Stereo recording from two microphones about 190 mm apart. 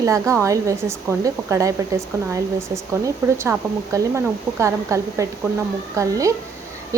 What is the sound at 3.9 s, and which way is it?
A woman's voice, 15° right (ahead or behind).